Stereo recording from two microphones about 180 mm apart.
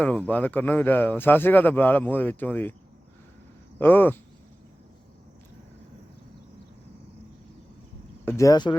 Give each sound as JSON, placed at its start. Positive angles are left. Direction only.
{"t": 0.3, "sound": "speech", "side_deg": 10}
{"t": 3.8, "sound": "speech", "side_deg": 10}
{"t": 8.2, "sound": "speech", "side_deg": 15}